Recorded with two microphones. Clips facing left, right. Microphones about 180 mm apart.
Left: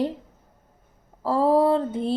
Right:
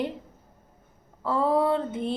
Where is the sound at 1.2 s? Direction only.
35° left (ahead or behind).